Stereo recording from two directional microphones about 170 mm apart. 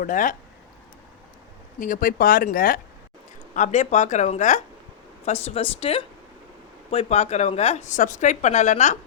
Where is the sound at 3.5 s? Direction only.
45° left (ahead or behind).